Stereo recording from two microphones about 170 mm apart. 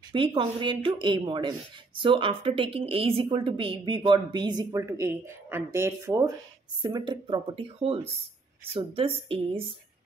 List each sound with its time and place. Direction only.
0.1 s a woman's voice: 30° right (ahead or behind)
6.8 s a woman's voice: 25° right (ahead or behind)